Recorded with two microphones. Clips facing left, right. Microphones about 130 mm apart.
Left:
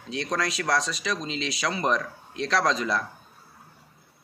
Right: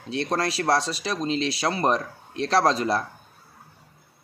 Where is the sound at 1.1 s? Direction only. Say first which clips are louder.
Right 8 dB; 45° right (ahead or behind).